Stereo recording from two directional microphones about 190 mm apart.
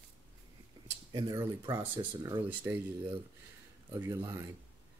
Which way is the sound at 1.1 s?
20° right (ahead or behind).